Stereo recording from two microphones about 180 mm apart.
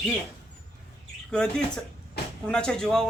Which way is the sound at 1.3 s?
5° left (ahead or behind).